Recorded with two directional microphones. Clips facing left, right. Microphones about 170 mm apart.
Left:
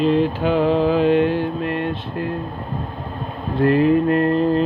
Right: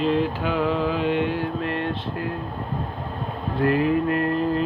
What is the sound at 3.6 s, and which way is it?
Mantra, 30° left (ahead or behind).